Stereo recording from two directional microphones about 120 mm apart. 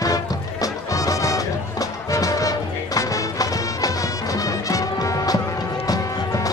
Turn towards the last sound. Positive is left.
turn(degrees=30)  # may be behind; listen again after turning